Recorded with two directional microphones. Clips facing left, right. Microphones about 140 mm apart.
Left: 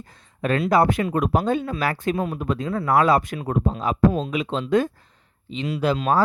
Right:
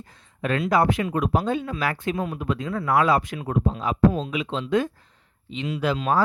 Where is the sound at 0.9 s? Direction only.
45° left (ahead or behind).